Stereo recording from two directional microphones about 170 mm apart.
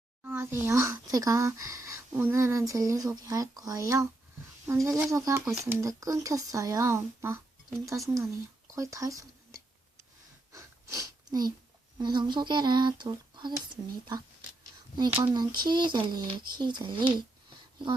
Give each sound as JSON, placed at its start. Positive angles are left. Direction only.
{"t": 0.3, "sound": "speech", "side_deg": -15}
{"t": 10.5, "sound": "wheeze", "side_deg": -15}
{"t": 11.9, "sound": "speech", "side_deg": -25}
{"t": 14.9, "sound": "speech", "side_deg": -25}